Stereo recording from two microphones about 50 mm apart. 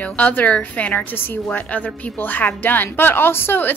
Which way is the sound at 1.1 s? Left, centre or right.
Left.